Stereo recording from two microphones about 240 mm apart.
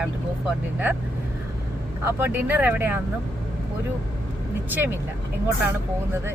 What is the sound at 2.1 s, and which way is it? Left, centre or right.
Speech, centre.